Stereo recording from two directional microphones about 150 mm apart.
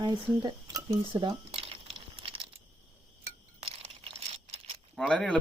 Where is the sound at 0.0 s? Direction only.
30° right (ahead or behind).